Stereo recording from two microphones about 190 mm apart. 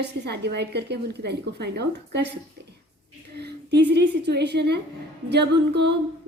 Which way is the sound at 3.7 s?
65° right (ahead or behind).